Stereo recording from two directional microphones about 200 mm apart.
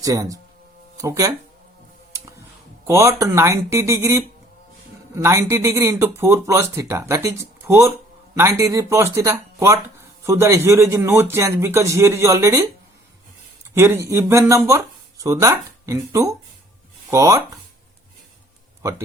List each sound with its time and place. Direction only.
0.0 s speech: 15° right (ahead or behind)
2.8 s speech: 15° right (ahead or behind)
13.7 s speech: 15° right (ahead or behind)
18.8 s speech: 15° right (ahead or behind)